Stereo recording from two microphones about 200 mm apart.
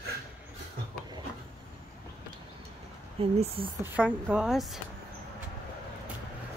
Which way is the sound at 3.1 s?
30° right (ahead or behind).